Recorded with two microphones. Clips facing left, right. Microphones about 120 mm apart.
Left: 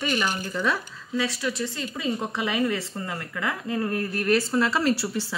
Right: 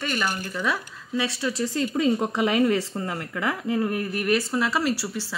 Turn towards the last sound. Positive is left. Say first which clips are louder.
# left 2 dB
turn(degrees=-5)  # may be behind; listen again after turning